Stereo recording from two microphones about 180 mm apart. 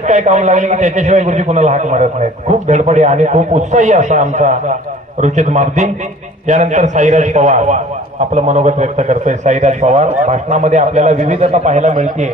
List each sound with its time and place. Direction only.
0.0 s a man's voice: 40° right (ahead or behind)